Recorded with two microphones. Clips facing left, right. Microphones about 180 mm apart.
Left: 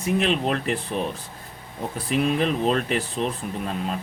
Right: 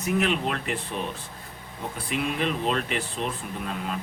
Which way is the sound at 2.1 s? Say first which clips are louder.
Left 5 dB; 40° left (ahead or behind).